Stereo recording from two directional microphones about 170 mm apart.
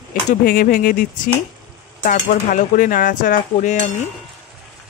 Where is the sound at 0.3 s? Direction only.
60° left (ahead or behind).